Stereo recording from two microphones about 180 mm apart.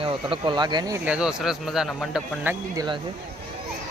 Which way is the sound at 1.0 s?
5° right (ahead or behind).